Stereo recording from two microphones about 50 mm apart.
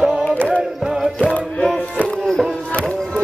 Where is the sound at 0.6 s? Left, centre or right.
Centre.